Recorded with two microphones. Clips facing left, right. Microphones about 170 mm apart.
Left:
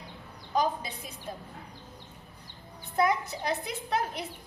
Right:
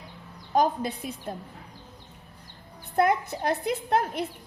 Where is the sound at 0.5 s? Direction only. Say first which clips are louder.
Right 5 dB; 55° right (ahead or behind).